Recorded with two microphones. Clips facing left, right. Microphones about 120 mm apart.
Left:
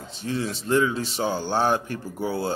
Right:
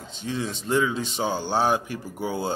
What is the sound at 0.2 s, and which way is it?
A man's voice, 20° right (ahead or behind).